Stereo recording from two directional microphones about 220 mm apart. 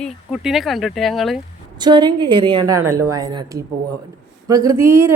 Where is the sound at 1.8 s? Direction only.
20° right (ahead or behind).